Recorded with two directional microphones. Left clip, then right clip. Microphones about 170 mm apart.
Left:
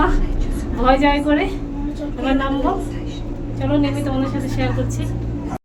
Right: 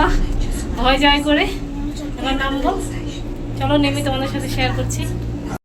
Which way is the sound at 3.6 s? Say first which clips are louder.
Right 2 dB; 5° left (ahead or behind).